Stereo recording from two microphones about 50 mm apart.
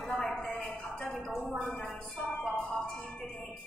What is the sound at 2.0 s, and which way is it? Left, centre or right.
Music, centre.